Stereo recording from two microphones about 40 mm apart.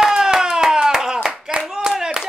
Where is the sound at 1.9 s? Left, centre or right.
Centre.